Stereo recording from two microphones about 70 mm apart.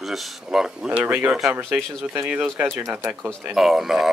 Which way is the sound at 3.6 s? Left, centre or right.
Centre.